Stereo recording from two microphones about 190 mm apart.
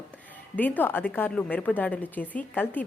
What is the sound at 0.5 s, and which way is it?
A woman's voice, 10° left (ahead or behind).